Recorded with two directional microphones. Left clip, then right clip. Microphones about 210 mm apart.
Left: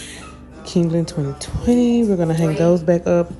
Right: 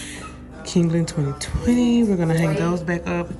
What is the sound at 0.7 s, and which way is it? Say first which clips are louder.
Speech: left 2 dB; 10° left (ahead or behind).